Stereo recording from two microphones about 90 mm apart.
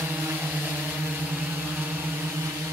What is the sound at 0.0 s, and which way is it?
Vehicle, 20° right (ahead or behind).